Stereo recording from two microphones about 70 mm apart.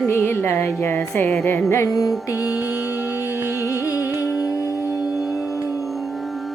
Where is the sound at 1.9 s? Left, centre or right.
Left.